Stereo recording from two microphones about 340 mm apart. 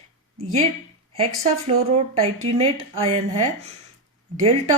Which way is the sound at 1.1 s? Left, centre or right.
Centre.